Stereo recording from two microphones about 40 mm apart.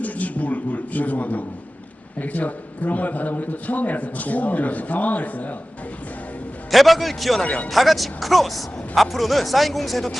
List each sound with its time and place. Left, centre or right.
0.0 s a sound: left
2.1 s a man's voice: left
6.7 s speech: centre
7.4 s a man's voice: left
7.7 s speech: centre